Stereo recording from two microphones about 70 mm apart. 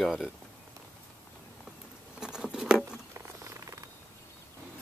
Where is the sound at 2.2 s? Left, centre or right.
Centre.